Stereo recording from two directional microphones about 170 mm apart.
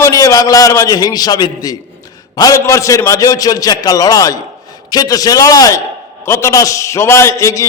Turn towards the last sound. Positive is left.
turn(degrees=15)  # may be behind; listen again after turning